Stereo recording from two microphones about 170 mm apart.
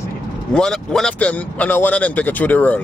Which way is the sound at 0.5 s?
5° left (ahead or behind).